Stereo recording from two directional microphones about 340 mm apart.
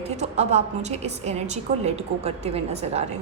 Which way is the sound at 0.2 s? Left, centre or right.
Centre.